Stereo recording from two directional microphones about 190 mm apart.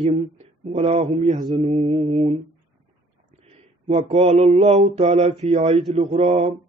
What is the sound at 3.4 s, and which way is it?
Mantra, 30° right (ahead or behind).